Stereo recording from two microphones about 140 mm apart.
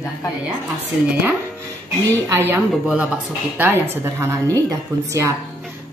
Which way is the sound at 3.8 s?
15° right (ahead or behind).